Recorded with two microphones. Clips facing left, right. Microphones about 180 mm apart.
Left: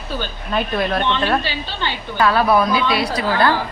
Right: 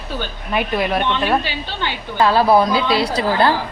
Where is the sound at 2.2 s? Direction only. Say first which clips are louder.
Right 2 dB; 30° right (ahead or behind).